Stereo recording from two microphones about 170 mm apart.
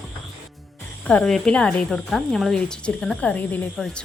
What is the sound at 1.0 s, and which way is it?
Speech, 5° left (ahead or behind).